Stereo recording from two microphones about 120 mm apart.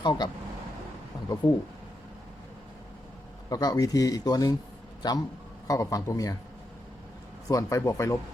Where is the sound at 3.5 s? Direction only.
30° left (ahead or behind).